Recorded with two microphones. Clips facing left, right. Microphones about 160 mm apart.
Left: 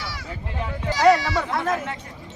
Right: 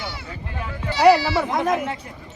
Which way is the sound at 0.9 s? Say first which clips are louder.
Right 2 dB; 30° right (ahead or behind).